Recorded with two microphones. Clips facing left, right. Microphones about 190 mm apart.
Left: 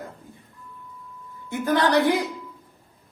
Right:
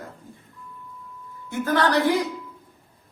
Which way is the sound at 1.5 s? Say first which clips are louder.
Left 1 dB; 15° left (ahead or behind).